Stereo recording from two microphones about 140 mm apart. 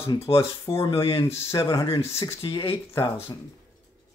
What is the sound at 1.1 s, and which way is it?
Speech, 40° left (ahead or behind).